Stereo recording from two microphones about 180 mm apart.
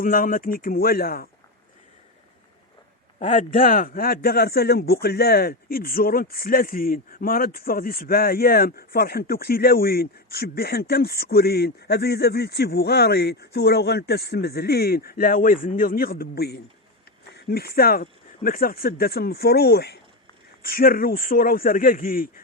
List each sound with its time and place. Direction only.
0.0 s speech: 50° left (ahead or behind)
3.2 s speech: 40° left (ahead or behind)